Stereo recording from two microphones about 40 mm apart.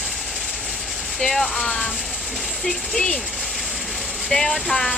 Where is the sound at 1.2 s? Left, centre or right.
Centre.